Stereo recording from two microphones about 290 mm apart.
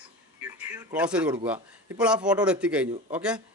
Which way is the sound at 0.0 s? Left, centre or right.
Centre.